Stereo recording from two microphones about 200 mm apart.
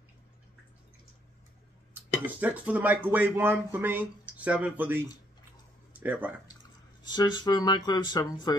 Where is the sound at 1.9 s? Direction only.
10° right (ahead or behind).